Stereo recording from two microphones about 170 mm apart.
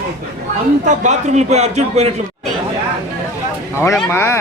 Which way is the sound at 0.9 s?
40° right (ahead or behind).